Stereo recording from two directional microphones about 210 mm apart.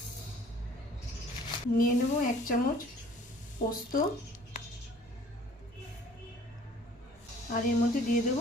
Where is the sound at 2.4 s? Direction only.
40° left (ahead or behind).